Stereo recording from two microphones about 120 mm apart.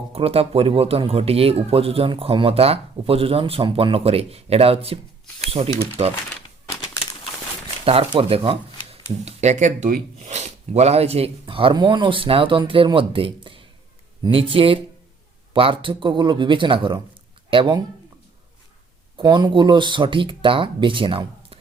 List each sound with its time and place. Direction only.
0.1 s speech: 55° right (ahead or behind)
8.1 s speech: 50° right (ahead or behind)
8.9 s speech: 65° right (ahead or behind); by 17.8 s 40° right (ahead or behind)
19.1 s speech: 40° right (ahead or behind)